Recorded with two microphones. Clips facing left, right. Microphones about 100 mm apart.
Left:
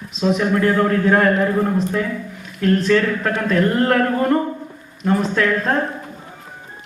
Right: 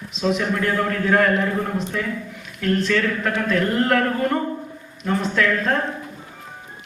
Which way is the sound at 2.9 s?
35° left (ahead or behind).